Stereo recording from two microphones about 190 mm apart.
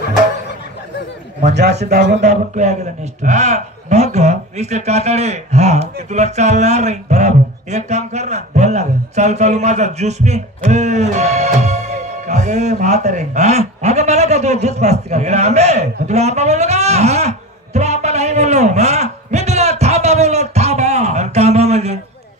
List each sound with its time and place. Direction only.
1.5 s speech: 60° right (ahead or behind)
2.1 s a man's voice: 40° right (ahead or behind)